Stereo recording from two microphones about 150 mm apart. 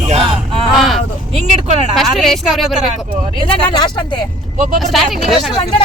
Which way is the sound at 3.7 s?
30° left (ahead or behind).